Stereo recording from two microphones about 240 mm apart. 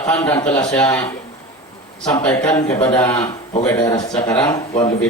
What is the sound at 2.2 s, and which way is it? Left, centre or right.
A man's voice, centre.